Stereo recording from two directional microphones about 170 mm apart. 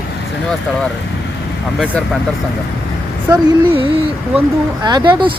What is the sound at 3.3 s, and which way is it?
Speech, 30° right (ahead or behind).